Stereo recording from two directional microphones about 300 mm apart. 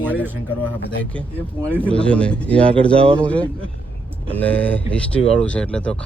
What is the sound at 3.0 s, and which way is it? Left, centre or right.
Speech, centre.